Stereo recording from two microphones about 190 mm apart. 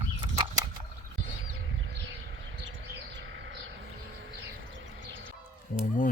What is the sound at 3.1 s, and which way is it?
Bird, 80° right.